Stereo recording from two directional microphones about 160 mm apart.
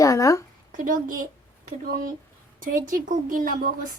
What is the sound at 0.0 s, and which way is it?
Speech, 20° left (ahead or behind).